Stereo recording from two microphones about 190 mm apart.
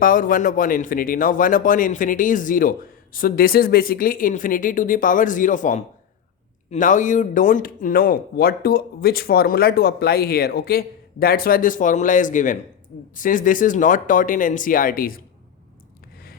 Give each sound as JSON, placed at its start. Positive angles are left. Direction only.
{"t": 0.0, "sound": "speech", "side_deg": 45}